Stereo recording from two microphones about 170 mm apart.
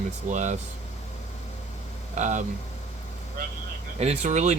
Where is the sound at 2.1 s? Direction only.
45° right (ahead or behind).